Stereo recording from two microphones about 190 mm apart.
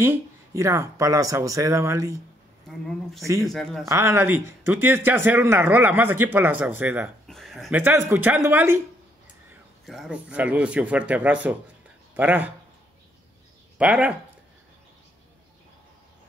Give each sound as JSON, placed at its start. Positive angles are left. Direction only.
{"t": 0.0, "sound": "speech", "side_deg": -15}
{"t": 3.4, "sound": "speech", "side_deg": 0}
{"t": 3.9, "sound": "speech", "side_deg": -15}
{"t": 7.2, "sound": "a sound", "side_deg": 0}
{"t": 7.7, "sound": "speech", "side_deg": -10}
{"t": 9.8, "sound": "speech", "side_deg": 0}
{"t": 13.7, "sound": "speech", "side_deg": -5}